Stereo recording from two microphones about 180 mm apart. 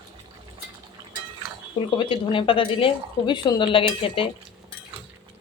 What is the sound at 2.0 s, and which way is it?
Speech, 30° left (ahead or behind).